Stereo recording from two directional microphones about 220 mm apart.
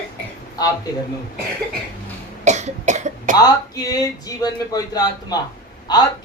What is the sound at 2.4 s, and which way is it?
Cough, 30° right (ahead or behind).